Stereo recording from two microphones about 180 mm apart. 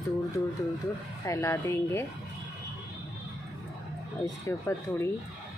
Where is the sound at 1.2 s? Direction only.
15° left (ahead or behind).